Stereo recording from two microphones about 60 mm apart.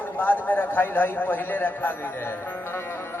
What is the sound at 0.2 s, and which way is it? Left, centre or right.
A man's voice, left.